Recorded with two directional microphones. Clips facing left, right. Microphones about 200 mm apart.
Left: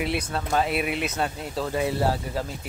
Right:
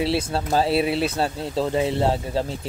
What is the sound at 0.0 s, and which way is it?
Speech, 30° right (ahead or behind).